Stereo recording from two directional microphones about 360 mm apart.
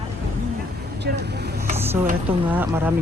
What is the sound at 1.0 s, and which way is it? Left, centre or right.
Speech, right.